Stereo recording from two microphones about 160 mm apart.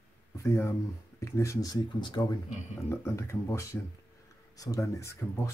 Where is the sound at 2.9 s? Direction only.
15° left (ahead or behind).